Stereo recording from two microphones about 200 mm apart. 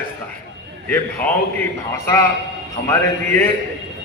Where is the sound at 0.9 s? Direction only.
10° left (ahead or behind).